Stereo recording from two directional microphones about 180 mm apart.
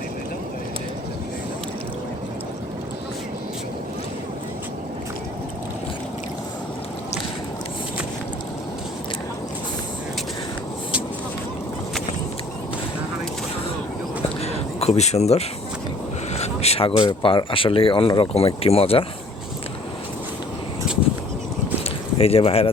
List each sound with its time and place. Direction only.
14.2 s a sound: 35° left (ahead or behind)
16.3 s speech: 35° left (ahead or behind)
22.2 s speech: 30° left (ahead or behind)